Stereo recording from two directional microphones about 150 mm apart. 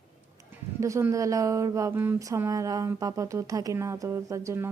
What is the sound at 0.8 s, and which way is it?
Speech, 20° right (ahead or behind).